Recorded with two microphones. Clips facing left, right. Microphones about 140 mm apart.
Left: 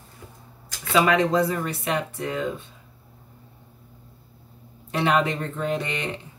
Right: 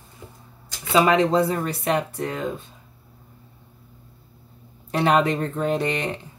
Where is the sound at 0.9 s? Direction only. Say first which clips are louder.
Right 2 dB; 30° right (ahead or behind).